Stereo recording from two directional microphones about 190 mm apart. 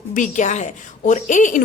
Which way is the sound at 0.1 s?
40° left (ahead or behind).